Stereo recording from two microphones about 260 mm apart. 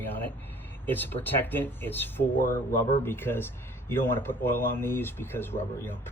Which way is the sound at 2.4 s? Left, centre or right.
Left.